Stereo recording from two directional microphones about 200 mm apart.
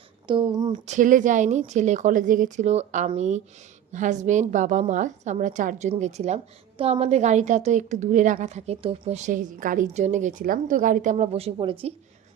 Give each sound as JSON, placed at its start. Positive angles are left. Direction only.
{"t": 0.3, "sound": "speech", "side_deg": -25}
{"t": 0.9, "sound": "a woman's voice", "side_deg": -40}